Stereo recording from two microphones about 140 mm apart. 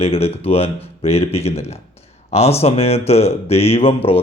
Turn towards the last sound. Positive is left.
turn(degrees=45)  # may be behind; listen again after turning